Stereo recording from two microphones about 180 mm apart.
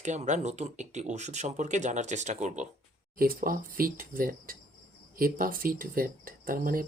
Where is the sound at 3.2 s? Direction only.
55° right (ahead or behind).